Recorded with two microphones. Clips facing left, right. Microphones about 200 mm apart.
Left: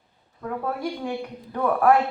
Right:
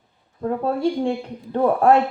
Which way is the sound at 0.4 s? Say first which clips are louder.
Right 7 dB; 30° right (ahead or behind).